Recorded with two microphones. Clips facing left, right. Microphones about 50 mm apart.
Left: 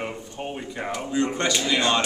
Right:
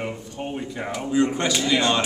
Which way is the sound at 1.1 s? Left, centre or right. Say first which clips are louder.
Right 3 dB; centre.